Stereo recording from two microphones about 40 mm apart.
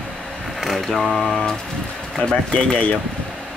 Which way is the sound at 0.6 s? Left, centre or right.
Centre.